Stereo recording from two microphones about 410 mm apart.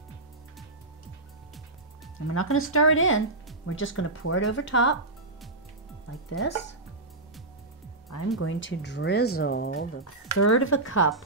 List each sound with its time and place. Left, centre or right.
2.3 s speech: left
6.4 s speech: centre
8.4 s speech: left
10.3 s speech: left